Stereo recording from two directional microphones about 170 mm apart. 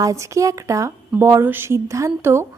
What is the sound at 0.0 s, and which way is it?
A woman's voice, 20° right (ahead or behind).